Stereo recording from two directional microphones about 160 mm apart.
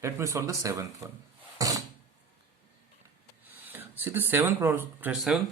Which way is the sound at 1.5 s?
20° right (ahead or behind).